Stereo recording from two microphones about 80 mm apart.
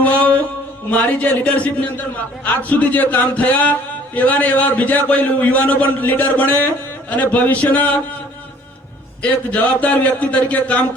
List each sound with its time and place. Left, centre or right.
0.0 s a sound: centre
0.9 s a man's voice: left
9.2 s a man's voice: centre